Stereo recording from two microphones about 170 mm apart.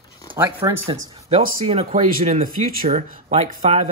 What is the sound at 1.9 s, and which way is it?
Speech, 50° right (ahead or behind).